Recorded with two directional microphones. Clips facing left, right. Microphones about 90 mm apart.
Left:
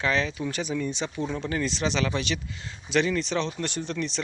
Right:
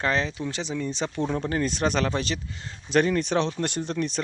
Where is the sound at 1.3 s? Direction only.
40° right (ahead or behind).